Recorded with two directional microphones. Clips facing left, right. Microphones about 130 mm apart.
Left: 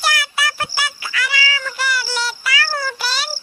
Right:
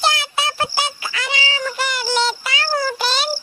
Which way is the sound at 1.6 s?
25° right (ahead or behind).